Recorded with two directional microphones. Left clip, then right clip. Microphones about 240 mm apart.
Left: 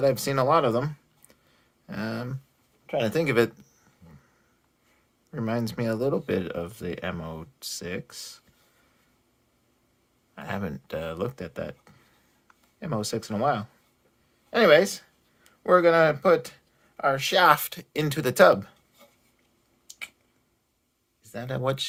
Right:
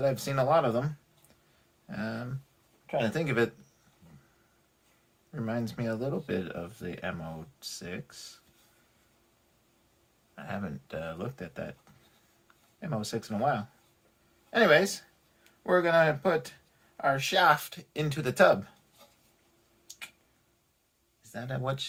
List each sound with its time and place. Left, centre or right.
0.0 s speech: left
1.9 s speech: left
5.3 s speech: left
10.3 s speech: left
21.3 s speech: left